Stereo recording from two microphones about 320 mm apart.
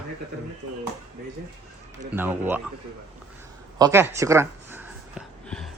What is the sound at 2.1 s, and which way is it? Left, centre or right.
Speech, centre.